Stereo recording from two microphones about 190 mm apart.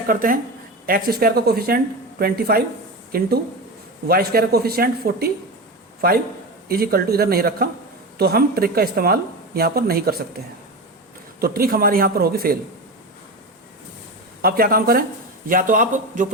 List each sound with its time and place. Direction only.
0.1 s a man's voice: 45° right (ahead or behind)
11.3 s speech: 50° right (ahead or behind)
14.4 s speech: 50° right (ahead or behind)